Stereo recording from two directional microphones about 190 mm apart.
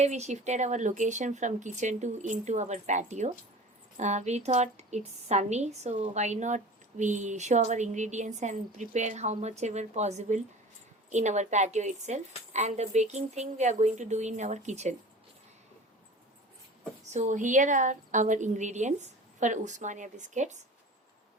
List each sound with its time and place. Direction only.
0.0 s a woman's voice: 35° right (ahead or behind)
17.1 s a woman's voice: 40° right (ahead or behind)